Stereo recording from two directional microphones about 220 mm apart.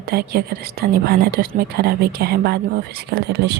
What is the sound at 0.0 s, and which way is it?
A woman's voice, 45° right (ahead or behind).